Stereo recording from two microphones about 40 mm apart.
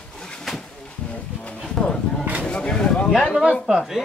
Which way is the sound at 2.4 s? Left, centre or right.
Left.